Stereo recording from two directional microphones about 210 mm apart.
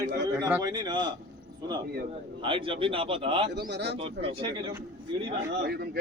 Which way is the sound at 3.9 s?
30° right (ahead or behind).